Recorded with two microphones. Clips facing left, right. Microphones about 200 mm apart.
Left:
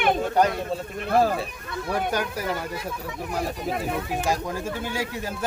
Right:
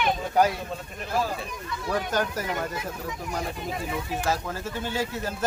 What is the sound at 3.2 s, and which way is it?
Speech, 60° left (ahead or behind).